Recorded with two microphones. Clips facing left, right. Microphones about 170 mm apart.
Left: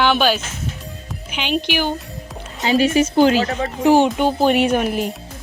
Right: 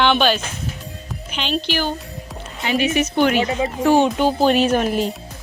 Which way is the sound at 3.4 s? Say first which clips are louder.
Left 1 dB; 10° right (ahead or behind).